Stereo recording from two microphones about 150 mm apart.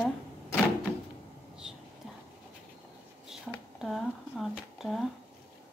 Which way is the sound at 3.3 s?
Centre (ahead or behind).